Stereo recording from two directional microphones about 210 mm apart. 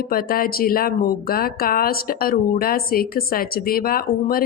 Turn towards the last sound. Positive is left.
turn(degrees=45)  # may be behind; listen again after turning